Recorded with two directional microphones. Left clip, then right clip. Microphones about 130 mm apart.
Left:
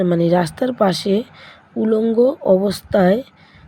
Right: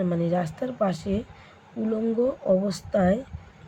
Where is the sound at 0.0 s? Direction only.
65° left (ahead or behind).